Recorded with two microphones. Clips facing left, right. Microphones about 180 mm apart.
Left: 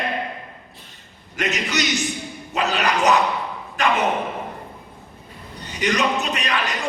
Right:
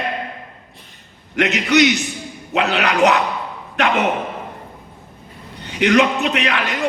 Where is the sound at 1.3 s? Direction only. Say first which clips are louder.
Right 9 dB; 70° right (ahead or behind).